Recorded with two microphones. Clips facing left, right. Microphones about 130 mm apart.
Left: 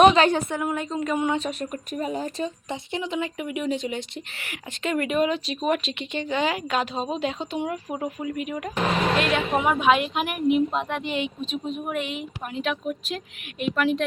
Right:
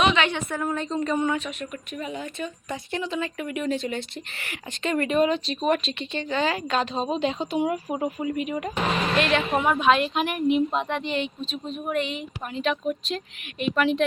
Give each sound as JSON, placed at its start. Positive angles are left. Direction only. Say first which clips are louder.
{"t": 0.0, "sound": "a woman's voice", "louder": "left 6 dB", "side_deg": 40}
{"t": 0.5, "sound": "speech", "louder": "even", "side_deg": 10}
{"t": 1.4, "sound": "speech", "louder": "left 4 dB", "side_deg": 35}
{"t": 2.6, "sound": "speech", "louder": "even", "side_deg": 20}